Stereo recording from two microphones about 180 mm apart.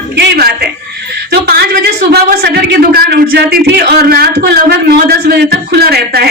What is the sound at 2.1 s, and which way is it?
Speech, 60° right (ahead or behind).